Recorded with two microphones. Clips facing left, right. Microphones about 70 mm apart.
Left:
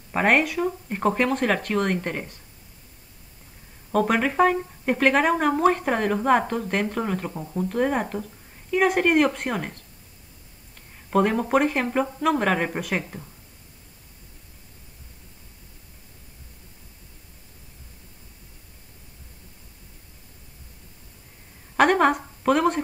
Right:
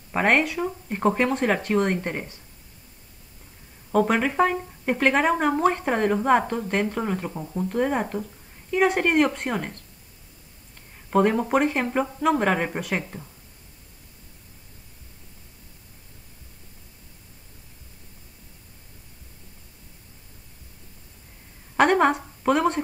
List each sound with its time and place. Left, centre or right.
0.1 s speech: centre
3.9 s speech: centre
11.1 s speech: centre
21.7 s a woman's voice: centre